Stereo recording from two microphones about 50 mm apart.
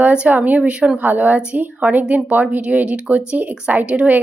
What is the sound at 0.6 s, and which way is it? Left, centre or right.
Speech, right.